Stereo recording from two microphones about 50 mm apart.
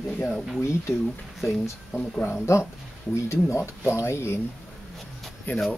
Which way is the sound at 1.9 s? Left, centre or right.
Left.